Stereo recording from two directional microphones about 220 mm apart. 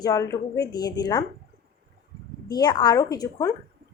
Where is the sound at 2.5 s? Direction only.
20° left (ahead or behind).